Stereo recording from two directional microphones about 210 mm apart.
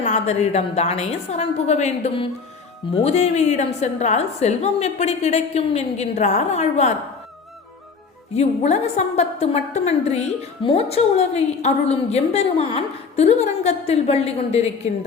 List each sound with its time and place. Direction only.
0.0 s a woman's voice: 30° left (ahead or behind)
8.3 s a woman's voice: 30° left (ahead or behind)